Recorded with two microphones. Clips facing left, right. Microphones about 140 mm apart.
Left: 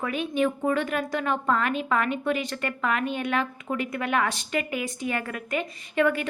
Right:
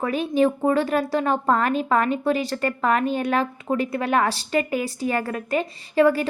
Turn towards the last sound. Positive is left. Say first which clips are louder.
# right 6 dB
turn(degrees=-35)  # may be behind; listen again after turning